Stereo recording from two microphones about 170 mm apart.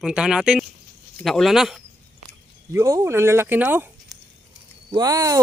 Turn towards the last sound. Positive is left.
turn(degrees=-20)  # may be behind; listen again after turning